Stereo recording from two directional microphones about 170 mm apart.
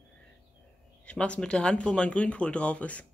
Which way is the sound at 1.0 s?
5° left (ahead or behind).